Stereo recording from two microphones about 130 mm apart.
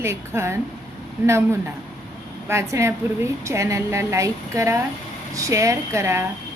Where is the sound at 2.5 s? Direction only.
20° right (ahead or behind).